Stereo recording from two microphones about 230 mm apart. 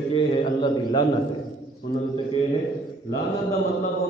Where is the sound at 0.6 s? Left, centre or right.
Left.